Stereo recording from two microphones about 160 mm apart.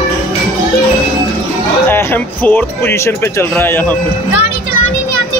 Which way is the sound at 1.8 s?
10° left (ahead or behind).